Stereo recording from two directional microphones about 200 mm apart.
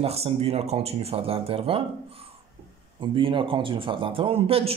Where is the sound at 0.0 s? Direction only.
30° right (ahead or behind).